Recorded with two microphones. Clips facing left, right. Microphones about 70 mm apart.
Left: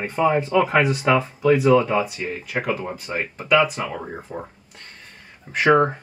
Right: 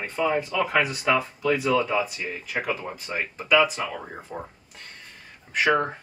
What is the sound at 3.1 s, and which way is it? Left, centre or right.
Speech, left.